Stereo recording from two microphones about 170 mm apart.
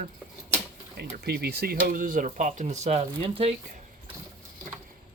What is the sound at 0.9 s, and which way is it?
Speech, 65° right (ahead or behind).